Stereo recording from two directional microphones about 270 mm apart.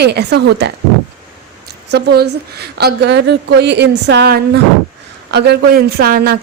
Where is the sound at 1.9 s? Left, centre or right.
Right.